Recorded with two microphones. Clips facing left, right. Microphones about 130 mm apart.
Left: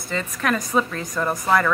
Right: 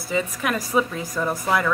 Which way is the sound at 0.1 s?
10° right (ahead or behind).